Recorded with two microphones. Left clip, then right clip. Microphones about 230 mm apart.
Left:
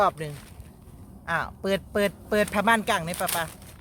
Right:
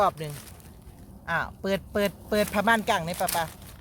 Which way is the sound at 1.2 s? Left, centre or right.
Centre.